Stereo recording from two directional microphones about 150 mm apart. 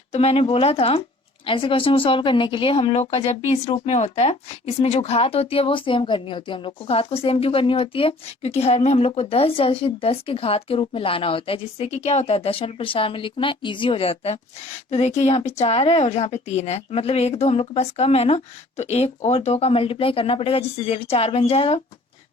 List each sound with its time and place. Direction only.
0.1 s speech: 40° left (ahead or behind)